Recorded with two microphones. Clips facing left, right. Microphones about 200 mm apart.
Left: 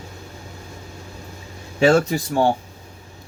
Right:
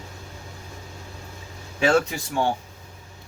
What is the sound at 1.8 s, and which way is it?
Speech, 35° left (ahead or behind).